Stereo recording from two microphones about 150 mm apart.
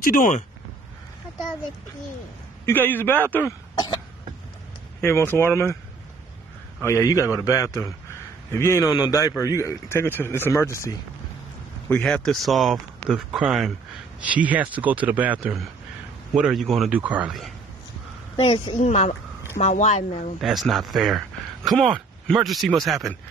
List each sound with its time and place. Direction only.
0.0 s speech: 65° left (ahead or behind)
2.6 s speech: 15° left (ahead or behind)
5.0 s speech: 15° left (ahead or behind)
6.8 s a man's voice: 20° left (ahead or behind)
11.9 s a man's voice: 5° left (ahead or behind)
18.4 s a woman's voice: 40° left (ahead or behind)
18.8 s speech: 55° left (ahead or behind)
20.3 s speech: centre (ahead or behind)